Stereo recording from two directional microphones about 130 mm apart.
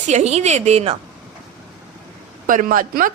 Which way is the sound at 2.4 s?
90° right.